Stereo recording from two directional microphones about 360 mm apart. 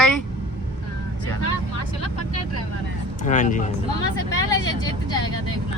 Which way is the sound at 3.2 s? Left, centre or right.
Left.